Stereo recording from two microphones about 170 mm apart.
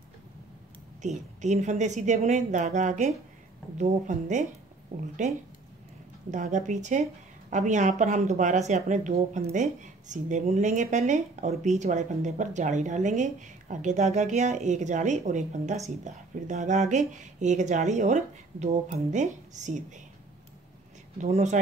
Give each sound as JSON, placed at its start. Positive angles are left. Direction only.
{"t": 1.0, "sound": "a woman's voice", "side_deg": -45}
{"t": 21.2, "sound": "a woman's voice", "side_deg": -45}